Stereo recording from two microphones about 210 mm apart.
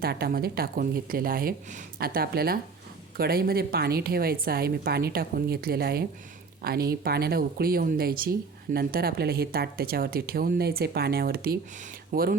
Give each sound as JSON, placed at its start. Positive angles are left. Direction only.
{"t": 0.0, "sound": "speech", "side_deg": -50}